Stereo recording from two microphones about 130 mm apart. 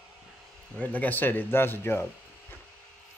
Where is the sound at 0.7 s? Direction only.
10° left (ahead or behind).